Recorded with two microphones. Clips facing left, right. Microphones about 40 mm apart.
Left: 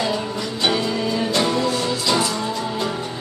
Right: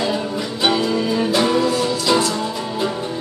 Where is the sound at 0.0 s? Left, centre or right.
Centre.